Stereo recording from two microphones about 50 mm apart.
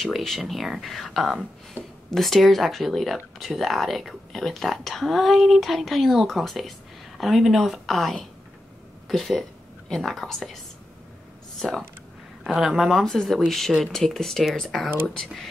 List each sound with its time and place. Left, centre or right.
0.0 s speech: centre
9.4 s speech: centre
11.6 s speech: centre
12.4 s speech: centre